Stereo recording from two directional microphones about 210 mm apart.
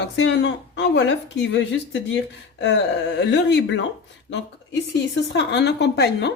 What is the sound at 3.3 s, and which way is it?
Speech, 60° left (ahead or behind).